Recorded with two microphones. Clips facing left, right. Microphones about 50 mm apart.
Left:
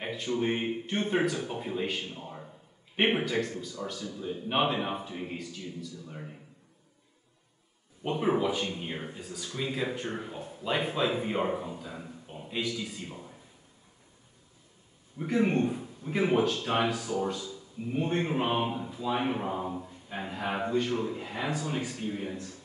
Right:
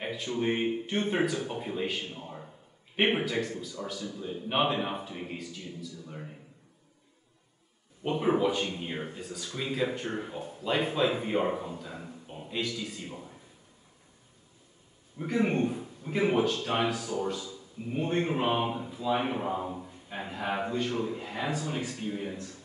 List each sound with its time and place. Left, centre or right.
0.0 s a sound: centre
0.4 s speech: centre
2.1 s a sound: centre
3.0 s speech: centre
8.0 s a man's voice: centre
15.3 s a man's voice: centre